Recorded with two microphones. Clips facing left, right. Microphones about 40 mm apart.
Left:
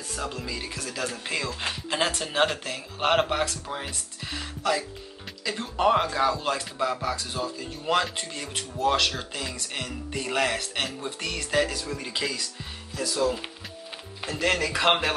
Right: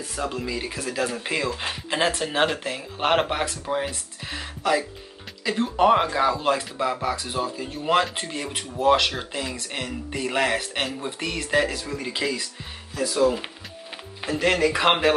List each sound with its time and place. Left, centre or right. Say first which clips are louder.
0.1 s speech: right 4 dB; centre